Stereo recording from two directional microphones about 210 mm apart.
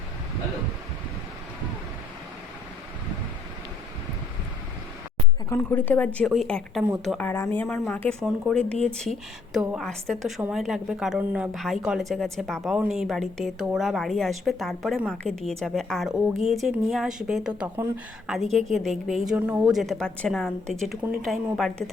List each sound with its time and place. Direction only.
5.5 s a woman's voice: 10° left (ahead or behind)